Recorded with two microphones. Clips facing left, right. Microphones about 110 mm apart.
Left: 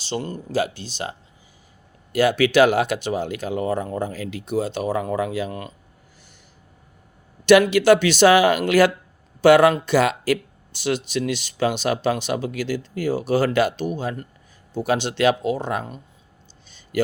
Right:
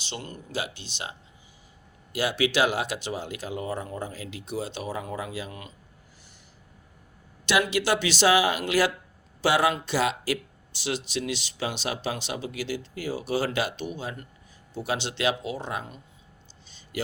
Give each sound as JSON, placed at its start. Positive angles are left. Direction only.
{"t": 0.0, "sound": "speech", "side_deg": 35}
{"t": 2.1, "sound": "speech", "side_deg": 50}
{"t": 7.4, "sound": "speech", "side_deg": 55}
{"t": 16.6, "sound": "a sound", "side_deg": 55}